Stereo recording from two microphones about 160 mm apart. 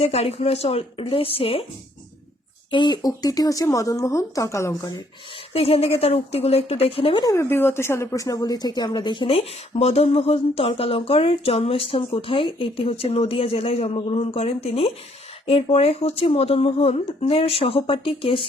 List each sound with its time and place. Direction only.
0.0 s a woman's voice: 40° left (ahead or behind)
2.6 s speech: 30° left (ahead or behind)
5.5 s a woman's voice: 40° left (ahead or behind)